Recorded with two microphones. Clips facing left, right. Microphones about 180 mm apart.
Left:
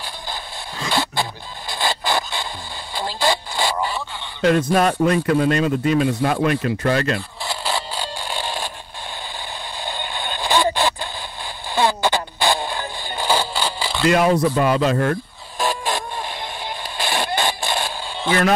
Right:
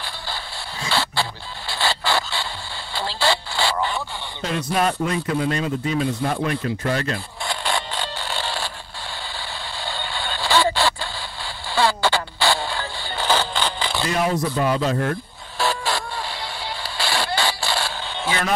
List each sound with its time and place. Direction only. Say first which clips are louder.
0.8 s chicken: left 2 dB; 15° left (ahead or behind)
1.7 s rub: left 1 dB; 15° left (ahead or behind)
2.9 s radio: left 1 dB; 15° left (ahead or behind)
4.4 s speech: left 6 dB; 55° left (ahead or behind)
7.4 s a sound: right 1 dB; 5° left (ahead or behind)
9.8 s a sound: left 1 dB; 15° left (ahead or behind)
11.7 s music: left 1 dB; 15° left (ahead or behind)
14.0 s speech: left 7 dB; 70° left (ahead or behind)
15.6 s chicken: left 1 dB; 15° left (ahead or behind)
17.0 s a sound: left 1 dB; 15° left (ahead or behind)